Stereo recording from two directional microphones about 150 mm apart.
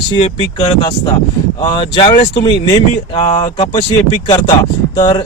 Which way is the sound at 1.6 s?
30° left (ahead or behind).